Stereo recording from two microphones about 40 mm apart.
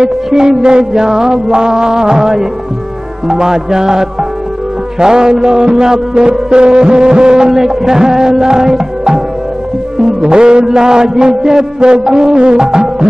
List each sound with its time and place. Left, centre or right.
0.3 s music: centre
10.2 s mantra: right